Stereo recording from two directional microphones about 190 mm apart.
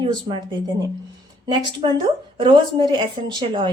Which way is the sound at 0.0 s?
25° right (ahead or behind).